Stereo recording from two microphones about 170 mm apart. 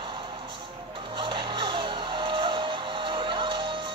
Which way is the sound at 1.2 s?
30° right (ahead or behind).